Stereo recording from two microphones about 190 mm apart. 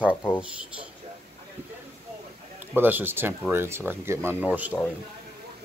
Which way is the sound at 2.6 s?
10° right (ahead or behind).